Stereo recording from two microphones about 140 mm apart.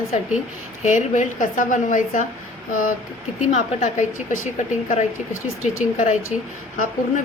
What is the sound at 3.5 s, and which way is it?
A woman's voice, 55° left (ahead or behind).